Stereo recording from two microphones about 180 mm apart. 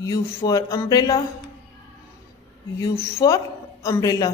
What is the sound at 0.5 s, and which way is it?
Speech, 20° left (ahead or behind).